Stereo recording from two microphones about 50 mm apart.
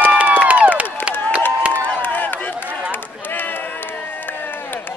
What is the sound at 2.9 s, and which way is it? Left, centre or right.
Run, left.